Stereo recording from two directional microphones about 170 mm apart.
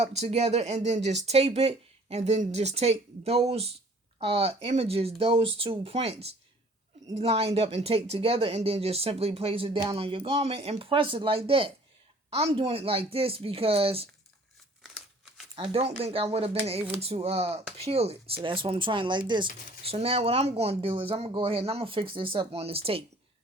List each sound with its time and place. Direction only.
0.0 s speech: 40° right (ahead or behind)
14.8 s crumpling: 5° right (ahead or behind)
15.5 s speech: 30° right (ahead or behind)